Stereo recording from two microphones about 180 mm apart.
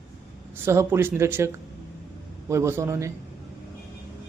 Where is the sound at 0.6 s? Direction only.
15° right (ahead or behind).